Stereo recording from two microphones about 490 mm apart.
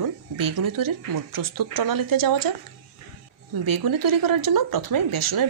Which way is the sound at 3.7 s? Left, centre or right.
Right.